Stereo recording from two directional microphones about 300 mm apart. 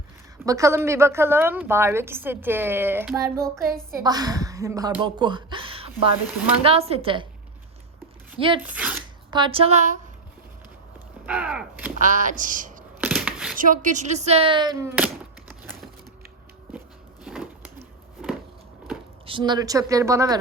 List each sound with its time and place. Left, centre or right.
0.4 s a woman's voice: centre
8.4 s a woman's voice: centre
8.6 s speech: centre
9.3 s speech: centre
11.3 s gunshot: centre
11.9 s speech: right
13.0 s a sound: centre
13.6 s speech: right; by 15.1 s centre
17.2 s a sound: centre
19.2 s a woman's voice: centre